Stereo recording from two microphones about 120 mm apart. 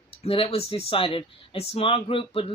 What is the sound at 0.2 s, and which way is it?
Speech, 50° left (ahead or behind).